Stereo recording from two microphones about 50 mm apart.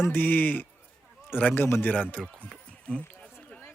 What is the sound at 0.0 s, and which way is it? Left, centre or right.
A man's voice, left.